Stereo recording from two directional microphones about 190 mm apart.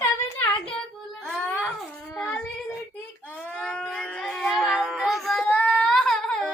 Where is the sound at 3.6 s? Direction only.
5° left (ahead or behind).